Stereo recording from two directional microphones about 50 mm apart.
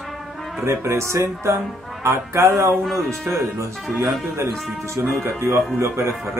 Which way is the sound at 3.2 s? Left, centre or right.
Right.